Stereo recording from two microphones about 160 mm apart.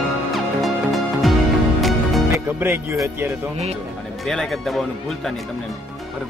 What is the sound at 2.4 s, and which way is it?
Music, 15° right (ahead or behind).